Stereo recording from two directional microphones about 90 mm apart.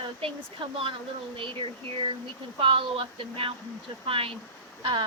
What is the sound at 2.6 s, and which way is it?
A woman's voice, 85° right.